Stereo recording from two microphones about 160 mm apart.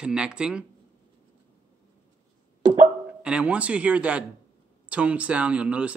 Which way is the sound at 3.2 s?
5° right (ahead or behind).